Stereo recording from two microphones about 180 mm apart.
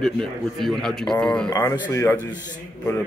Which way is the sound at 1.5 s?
20° left (ahead or behind).